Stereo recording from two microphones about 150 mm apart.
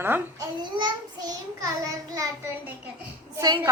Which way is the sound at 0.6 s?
30° right (ahead or behind).